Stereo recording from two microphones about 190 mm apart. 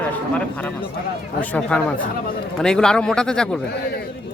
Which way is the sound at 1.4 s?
5° left (ahead or behind).